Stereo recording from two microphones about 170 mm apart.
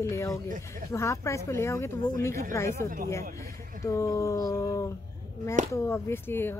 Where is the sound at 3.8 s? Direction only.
20° left (ahead or behind).